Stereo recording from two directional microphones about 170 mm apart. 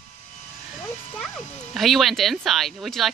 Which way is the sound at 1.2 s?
Centre (ahead or behind).